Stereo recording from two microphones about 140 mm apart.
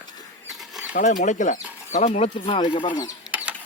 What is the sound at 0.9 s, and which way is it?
Speech, 70° left (ahead or behind).